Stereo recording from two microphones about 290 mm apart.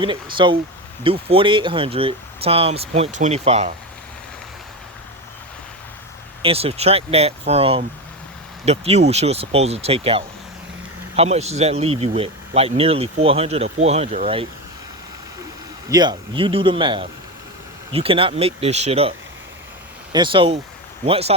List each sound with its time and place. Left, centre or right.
0.0 s speech: centre
6.4 s speech: centre
15.9 s speech: centre
20.1 s speech: centre